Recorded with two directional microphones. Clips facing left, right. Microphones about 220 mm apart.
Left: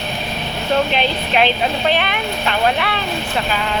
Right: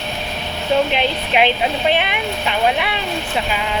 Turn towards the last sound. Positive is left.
turn(degrees=-10)  # may be behind; listen again after turning